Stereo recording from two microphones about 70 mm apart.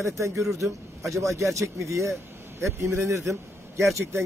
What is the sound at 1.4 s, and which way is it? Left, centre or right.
A man's voice, right.